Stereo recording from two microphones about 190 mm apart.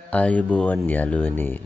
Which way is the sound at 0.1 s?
5° left (ahead or behind).